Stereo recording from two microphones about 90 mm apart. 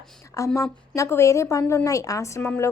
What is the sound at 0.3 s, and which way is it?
A woman's voice, 35° left (ahead or behind).